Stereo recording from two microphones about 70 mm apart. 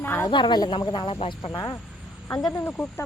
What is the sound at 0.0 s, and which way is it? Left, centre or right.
Snake, left.